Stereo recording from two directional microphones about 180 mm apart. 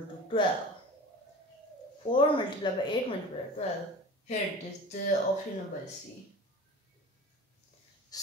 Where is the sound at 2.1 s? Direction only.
25° left (ahead or behind).